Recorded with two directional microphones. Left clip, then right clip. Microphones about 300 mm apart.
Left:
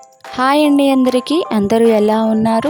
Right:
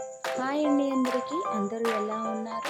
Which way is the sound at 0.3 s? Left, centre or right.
Left.